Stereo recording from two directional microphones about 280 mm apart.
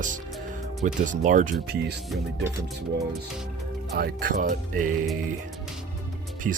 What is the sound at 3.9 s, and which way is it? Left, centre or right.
Speech, right.